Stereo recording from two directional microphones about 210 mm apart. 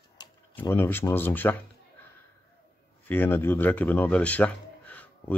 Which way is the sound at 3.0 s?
10° left (ahead or behind).